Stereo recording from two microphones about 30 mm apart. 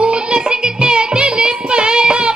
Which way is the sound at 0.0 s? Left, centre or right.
Right.